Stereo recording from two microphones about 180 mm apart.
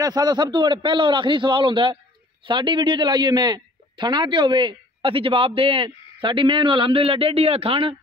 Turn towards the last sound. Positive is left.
turn(degrees=-30)  # may be behind; listen again after turning